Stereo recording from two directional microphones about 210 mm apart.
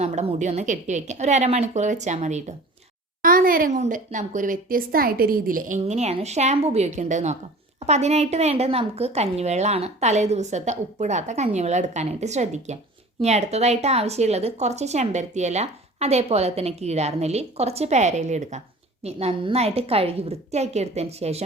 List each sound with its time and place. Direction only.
0.0 s a woman's voice: 30° right (ahead or behind)